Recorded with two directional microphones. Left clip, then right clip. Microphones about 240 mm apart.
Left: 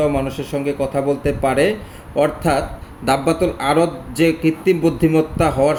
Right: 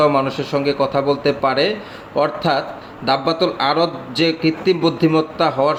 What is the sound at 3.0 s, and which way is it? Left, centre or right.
A man's voice, centre.